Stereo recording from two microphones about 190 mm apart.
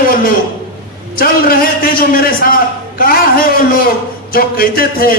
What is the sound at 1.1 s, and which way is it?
A man's voice, 50° left (ahead or behind).